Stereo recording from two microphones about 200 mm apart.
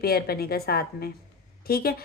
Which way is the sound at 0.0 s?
50° left (ahead or behind).